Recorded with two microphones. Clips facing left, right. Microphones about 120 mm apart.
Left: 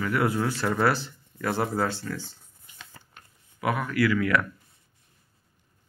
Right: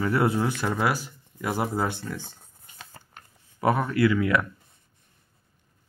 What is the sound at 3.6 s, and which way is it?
Speech, 30° right (ahead or behind).